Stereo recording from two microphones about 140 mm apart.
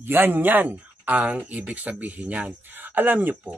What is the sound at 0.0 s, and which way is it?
Speech, 15° right (ahead or behind).